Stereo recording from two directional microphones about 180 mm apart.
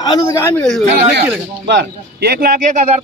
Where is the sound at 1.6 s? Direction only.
65° right (ahead or behind).